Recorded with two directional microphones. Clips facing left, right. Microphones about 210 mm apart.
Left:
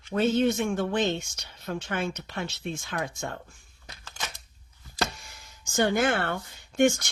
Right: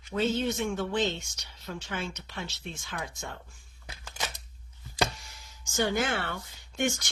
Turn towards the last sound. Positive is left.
turn(degrees=55)  # may be behind; listen again after turning